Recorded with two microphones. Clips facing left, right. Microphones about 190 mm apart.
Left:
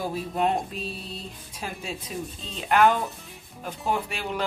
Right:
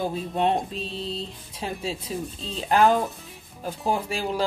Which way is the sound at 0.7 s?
25° right (ahead or behind).